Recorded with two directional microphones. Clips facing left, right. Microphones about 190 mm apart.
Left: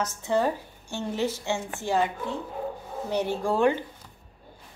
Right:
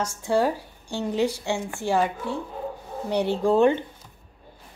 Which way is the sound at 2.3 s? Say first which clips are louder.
Right 3 dB; 20° left (ahead or behind).